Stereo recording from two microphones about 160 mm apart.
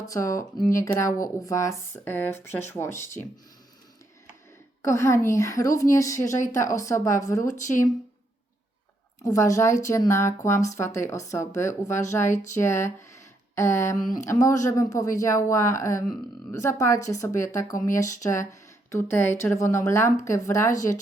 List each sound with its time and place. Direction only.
0.0 s a woman's voice: 20° left (ahead or behind)
4.8 s a woman's voice: 20° left (ahead or behind)
7.4 s speech: 50° left (ahead or behind)
9.2 s a woman's voice: 20° left (ahead or behind)